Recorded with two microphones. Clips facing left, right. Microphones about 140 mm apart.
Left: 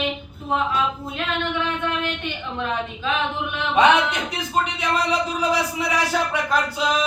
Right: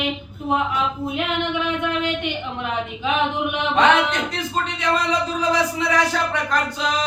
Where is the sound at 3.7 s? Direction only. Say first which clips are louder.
Left 1 dB; 10° left (ahead or behind).